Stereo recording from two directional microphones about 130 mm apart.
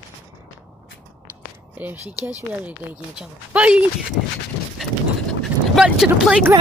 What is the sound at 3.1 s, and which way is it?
Speech, 10° right (ahead or behind).